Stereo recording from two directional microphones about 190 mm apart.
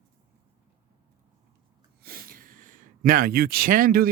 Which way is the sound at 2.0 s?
50° right (ahead or behind).